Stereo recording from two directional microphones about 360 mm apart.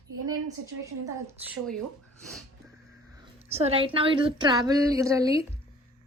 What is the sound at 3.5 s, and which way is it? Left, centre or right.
A woman's voice, centre.